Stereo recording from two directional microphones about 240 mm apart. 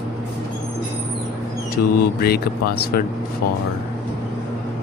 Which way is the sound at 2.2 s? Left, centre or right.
Left.